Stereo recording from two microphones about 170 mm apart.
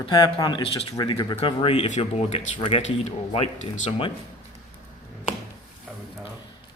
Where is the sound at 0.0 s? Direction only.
25° left (ahead or behind).